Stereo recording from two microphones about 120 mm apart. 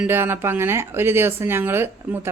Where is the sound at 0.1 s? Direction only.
20° right (ahead or behind).